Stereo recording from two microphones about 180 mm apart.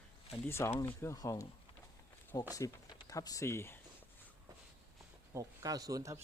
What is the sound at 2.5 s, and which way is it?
Speech, 20° left (ahead or behind).